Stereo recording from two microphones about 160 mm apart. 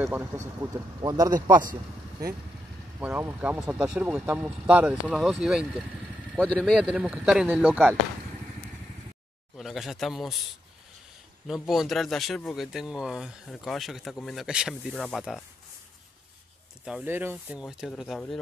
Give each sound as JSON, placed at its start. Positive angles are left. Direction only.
{"t": 0.0, "sound": "speech", "side_deg": -15}
{"t": 3.0, "sound": "speech", "side_deg": -15}
{"t": 9.6, "sound": "speech", "side_deg": 0}
{"t": 11.4, "sound": "speech", "side_deg": 0}
{"t": 16.8, "sound": "speech", "side_deg": -10}